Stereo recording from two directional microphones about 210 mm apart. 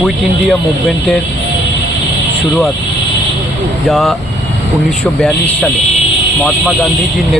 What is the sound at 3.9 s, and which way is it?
Speech, centre (ahead or behind).